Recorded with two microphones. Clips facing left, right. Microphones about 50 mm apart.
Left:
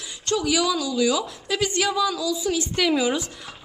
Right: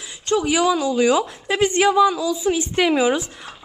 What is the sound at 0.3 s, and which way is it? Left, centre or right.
A woman's voice, right.